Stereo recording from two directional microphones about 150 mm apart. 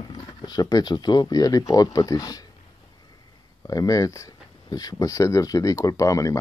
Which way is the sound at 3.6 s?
25° left (ahead or behind).